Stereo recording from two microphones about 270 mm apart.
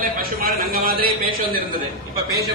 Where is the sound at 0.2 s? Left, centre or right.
Right.